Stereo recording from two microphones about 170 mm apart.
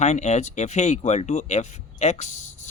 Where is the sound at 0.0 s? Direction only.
40° left (ahead or behind).